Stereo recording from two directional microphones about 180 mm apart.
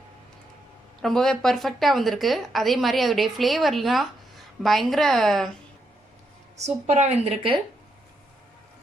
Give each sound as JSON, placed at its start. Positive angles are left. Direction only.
{"t": 1.0, "sound": "a woman's voice", "side_deg": 5}
{"t": 6.6, "sound": "speech", "side_deg": -40}